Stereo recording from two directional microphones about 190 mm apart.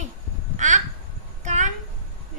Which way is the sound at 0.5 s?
40° right (ahead or behind).